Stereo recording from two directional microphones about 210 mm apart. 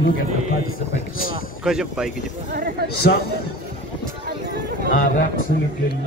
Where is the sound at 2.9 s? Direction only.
50° left (ahead or behind).